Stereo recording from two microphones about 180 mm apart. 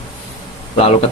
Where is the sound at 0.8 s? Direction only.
35° left (ahead or behind).